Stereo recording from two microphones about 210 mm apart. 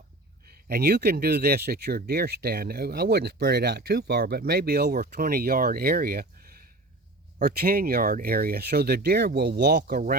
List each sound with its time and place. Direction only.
0.7 s speech: 50° right (ahead or behind)